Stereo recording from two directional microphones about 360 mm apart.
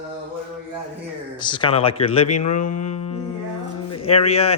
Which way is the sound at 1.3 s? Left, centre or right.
Centre.